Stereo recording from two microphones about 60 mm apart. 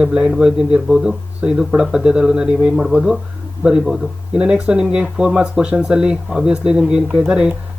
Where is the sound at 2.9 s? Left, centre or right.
Right.